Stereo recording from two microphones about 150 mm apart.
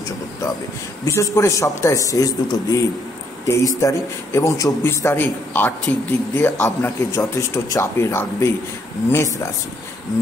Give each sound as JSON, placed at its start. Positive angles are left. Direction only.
{"t": 1.0, "sound": "a man's voice", "side_deg": 20}